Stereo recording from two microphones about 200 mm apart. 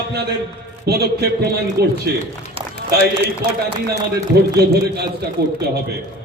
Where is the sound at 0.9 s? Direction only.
55° right (ahead or behind).